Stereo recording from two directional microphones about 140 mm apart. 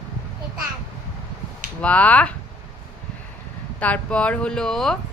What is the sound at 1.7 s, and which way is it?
Speech, 10° left (ahead or behind).